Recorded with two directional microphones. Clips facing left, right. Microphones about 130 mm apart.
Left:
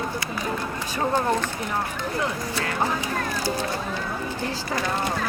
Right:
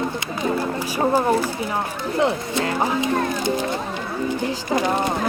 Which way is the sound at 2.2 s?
25° right (ahead or behind).